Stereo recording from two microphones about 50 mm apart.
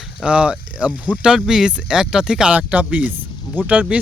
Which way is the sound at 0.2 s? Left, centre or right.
Right.